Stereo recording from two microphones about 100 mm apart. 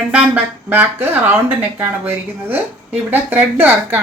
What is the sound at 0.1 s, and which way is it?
A woman's voice, 15° right (ahead or behind).